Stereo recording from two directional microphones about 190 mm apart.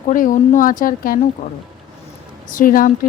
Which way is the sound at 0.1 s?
45° left (ahead or behind).